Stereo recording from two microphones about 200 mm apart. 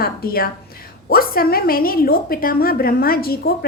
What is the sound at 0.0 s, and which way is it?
A woman's voice, 50° left (ahead or behind).